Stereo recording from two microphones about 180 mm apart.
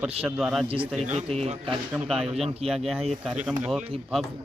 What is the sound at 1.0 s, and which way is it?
Speech, 35° right (ahead or behind).